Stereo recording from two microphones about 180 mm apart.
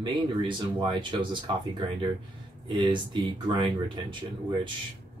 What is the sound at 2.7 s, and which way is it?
Speech, 25° right (ahead or behind).